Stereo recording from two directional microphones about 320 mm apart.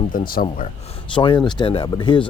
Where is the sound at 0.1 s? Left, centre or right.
Left.